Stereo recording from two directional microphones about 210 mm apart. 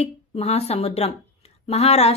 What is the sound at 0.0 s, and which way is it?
A woman's voice, 30° left (ahead or behind).